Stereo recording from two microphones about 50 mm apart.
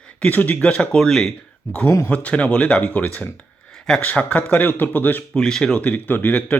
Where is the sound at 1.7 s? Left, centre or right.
Left.